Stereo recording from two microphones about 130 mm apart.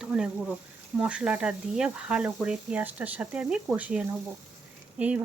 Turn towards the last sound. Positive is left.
turn(degrees=-10)  # may be behind; listen again after turning